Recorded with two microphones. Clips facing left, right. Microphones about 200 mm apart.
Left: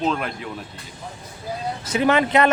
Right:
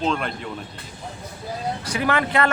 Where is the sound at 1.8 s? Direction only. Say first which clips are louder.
Left 5 dB; 25° left (ahead or behind).